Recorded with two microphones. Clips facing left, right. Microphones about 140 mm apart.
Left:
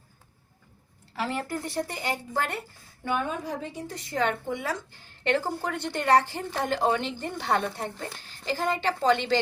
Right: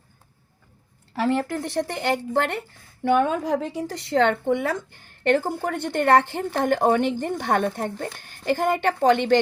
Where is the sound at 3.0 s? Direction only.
80° right.